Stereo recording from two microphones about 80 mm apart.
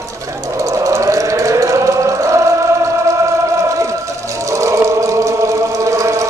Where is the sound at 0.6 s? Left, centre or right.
Right.